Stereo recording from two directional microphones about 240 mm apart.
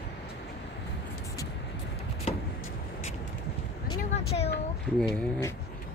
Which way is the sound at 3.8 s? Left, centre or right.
Left.